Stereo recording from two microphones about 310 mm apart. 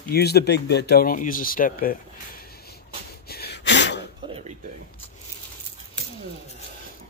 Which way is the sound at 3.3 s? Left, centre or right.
Left.